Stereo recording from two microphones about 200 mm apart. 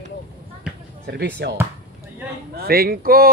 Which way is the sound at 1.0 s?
55° right (ahead or behind).